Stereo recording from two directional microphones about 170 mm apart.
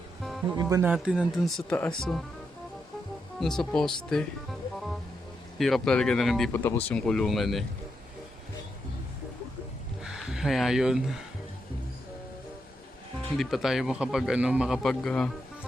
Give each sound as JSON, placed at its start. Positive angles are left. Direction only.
{"t": 0.2, "sound": "music", "side_deg": 0}
{"t": 0.5, "sound": "speech", "side_deg": -20}
{"t": 0.8, "sound": "speech", "side_deg": -5}
{"t": 3.4, "sound": "speech", "side_deg": 0}
{"t": 5.5, "sound": "speech", "side_deg": 0}
{"t": 6.5, "sound": "speech", "side_deg": 15}
{"t": 10.0, "sound": "speech", "side_deg": -5}
{"t": 13.3, "sound": "speech", "side_deg": 0}